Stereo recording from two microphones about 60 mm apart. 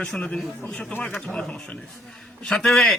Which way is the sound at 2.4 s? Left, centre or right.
Centre.